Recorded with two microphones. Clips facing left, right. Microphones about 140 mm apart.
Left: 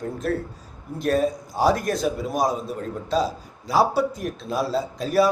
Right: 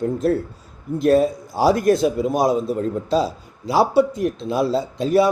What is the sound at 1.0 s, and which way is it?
A man's voice, 30° right (ahead or behind).